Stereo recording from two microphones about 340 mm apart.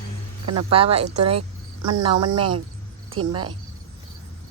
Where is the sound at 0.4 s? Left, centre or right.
Centre.